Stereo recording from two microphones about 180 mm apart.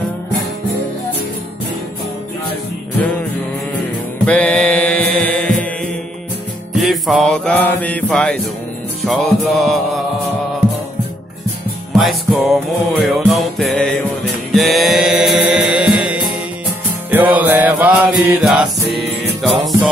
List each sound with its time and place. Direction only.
4.3 s mantra: 5° left (ahead or behind)
6.7 s music: centre (ahead or behind)
12.0 s music: centre (ahead or behind)
18.8 s music: 65° right (ahead or behind)